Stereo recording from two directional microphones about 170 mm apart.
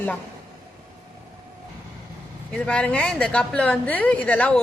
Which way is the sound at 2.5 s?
5° left (ahead or behind).